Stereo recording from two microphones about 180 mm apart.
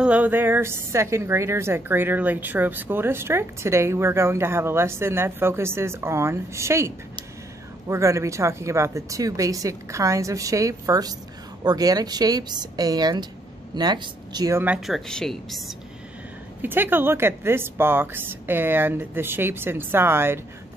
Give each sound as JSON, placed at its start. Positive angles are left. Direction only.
{"t": 0.0, "sound": "a woman's voice", "side_deg": -10}
{"t": 7.9, "sound": "a woman's voice", "side_deg": -15}
{"t": 14.9, "sound": "speech", "side_deg": 0}
{"t": 16.6, "sound": "a woman's voice", "side_deg": -10}